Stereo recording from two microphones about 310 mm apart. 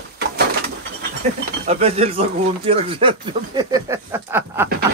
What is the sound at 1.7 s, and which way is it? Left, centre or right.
Speech, centre.